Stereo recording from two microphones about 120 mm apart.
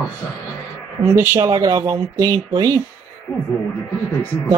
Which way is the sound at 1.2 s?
20° right (ahead or behind).